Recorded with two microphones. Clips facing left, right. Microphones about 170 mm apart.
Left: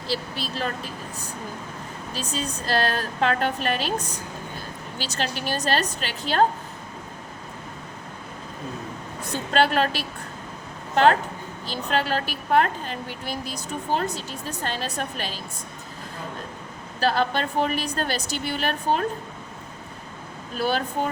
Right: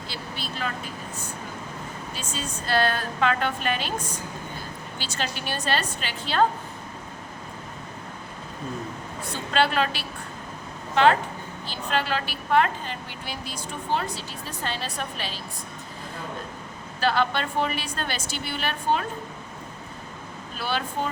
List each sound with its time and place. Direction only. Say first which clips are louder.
0.1 s a woman's voice: left 8 dB; 35° left (ahead or behind)
2.1 s a woman's voice: left 6 dB; 40° left (ahead or behind)
4.9 s a woman's voice: left 3 dB; 40° left (ahead or behind)
9.5 s a woman's voice: left 2 dB; 40° left (ahead or behind)
11.6 s a woman's voice: left 2 dB; 40° left (ahead or behind)
17.0 s a woman's voice: left 1 dB; 40° left (ahead or behind)
20.6 s a woman's voice: left 4 dB; 45° left (ahead or behind)